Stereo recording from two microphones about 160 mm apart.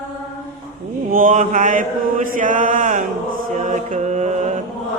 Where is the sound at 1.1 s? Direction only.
55° right (ahead or behind).